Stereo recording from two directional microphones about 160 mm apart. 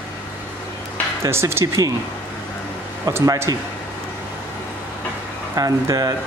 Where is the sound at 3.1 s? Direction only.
15° right (ahead or behind).